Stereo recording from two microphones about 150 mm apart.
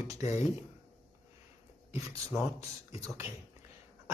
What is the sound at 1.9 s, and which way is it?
Speech, 20° right (ahead or behind).